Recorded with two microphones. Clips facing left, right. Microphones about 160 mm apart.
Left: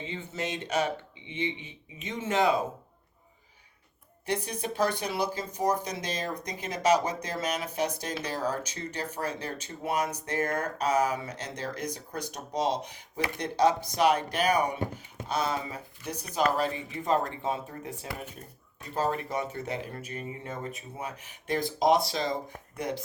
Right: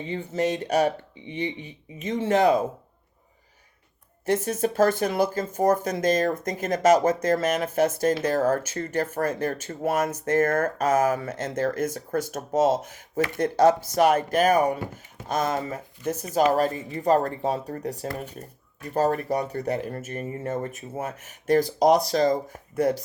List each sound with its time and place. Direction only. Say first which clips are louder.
0.1 s speech: right 11 dB; 45° right (ahead or behind)
4.3 s speech: right 8 dB; 45° right (ahead or behind)